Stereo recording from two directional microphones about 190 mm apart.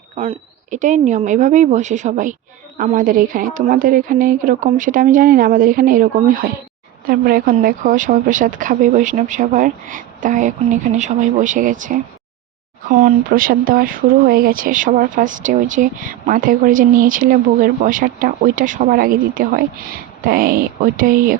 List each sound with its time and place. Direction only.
0.2 s a woman's voice: 35° right (ahead or behind)